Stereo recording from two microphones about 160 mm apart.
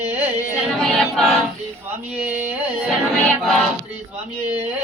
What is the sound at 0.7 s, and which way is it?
Choir, centre (ahead or behind).